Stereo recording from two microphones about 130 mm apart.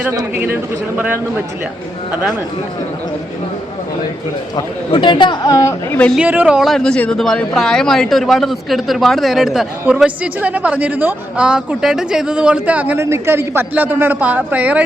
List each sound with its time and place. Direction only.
0.3 s a woman's voice: 15° right (ahead or behind)
4.5 s speech: 35° left (ahead or behind)
6.1 s a woman's voice: 10° right (ahead or behind)